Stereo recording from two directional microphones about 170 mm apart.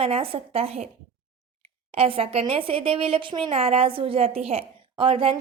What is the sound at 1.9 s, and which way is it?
A woman's voice, 35° right (ahead or behind).